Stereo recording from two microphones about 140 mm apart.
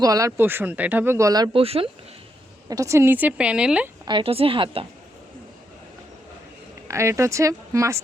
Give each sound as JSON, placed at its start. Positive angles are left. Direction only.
{"t": 0.0, "sound": "speech", "side_deg": -25}
{"t": 1.5, "sound": "speech", "side_deg": -40}
{"t": 2.6, "sound": "speech", "side_deg": -25}
{"t": 4.0, "sound": "a woman's voice", "side_deg": -40}
{"t": 6.8, "sound": "speech", "side_deg": -20}